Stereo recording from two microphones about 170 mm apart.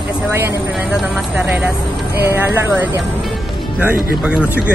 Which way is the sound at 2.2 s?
15° right (ahead or behind).